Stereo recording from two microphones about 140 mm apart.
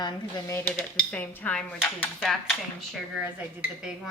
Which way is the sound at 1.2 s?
15° left (ahead or behind).